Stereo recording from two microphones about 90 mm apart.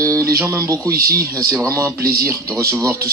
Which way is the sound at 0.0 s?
35° right (ahead or behind).